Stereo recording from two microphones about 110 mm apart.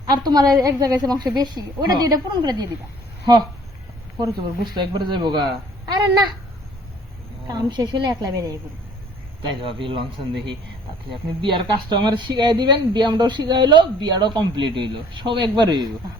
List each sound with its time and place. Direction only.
0.1 s a woman's voice: 40° right (ahead or behind)
4.2 s speech: 45° right (ahead or behind)
7.4 s a woman's voice: 35° right (ahead or behind)
9.4 s speech: 55° right (ahead or behind)
11.3 s speech: 45° right (ahead or behind)